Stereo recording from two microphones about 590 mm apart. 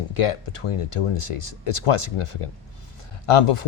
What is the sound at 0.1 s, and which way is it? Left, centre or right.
Speech, left.